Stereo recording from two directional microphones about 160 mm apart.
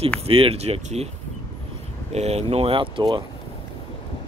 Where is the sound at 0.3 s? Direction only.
35° right (ahead or behind).